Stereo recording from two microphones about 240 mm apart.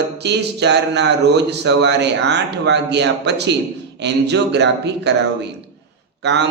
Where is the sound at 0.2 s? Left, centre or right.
Right.